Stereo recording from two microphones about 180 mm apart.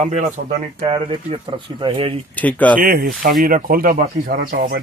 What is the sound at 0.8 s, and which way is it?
Speech, 30° right (ahead or behind).